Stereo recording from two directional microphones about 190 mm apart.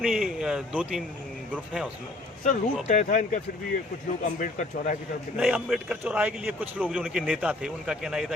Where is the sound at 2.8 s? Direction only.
40° left (ahead or behind).